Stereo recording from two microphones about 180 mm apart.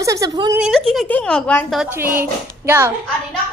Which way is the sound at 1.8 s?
10° right (ahead or behind).